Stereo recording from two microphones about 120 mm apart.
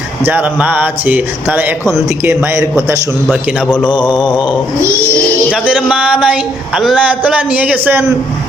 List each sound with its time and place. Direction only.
0.3 s speech: 15° right (ahead or behind)
3.2 s a man's voice: 10° left (ahead or behind)
3.8 s mantra: 40° left (ahead or behind)
5.5 s speech: 10° right (ahead or behind)